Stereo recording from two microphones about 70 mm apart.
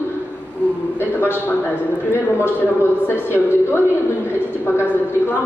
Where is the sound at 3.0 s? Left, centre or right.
Left.